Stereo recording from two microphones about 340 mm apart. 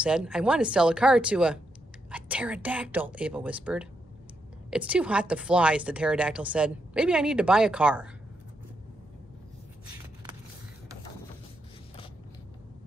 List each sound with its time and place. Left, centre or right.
0.0 s speech: centre